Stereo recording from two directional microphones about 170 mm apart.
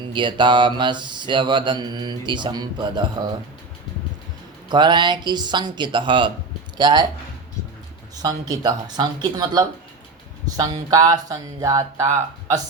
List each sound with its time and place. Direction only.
0.0 s speech: 30° right (ahead or behind)
4.7 s speech: 25° right (ahead or behind)
8.1 s speech: 20° right (ahead or behind)